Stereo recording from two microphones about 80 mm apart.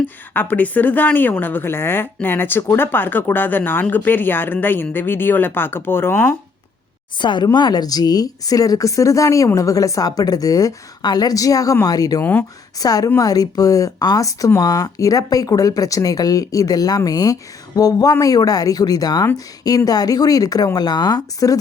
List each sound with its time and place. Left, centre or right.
0.3 s speech: left
7.2 s speech: left
7.4 s speech: left
12.2 s speech: centre
12.8 s speech: left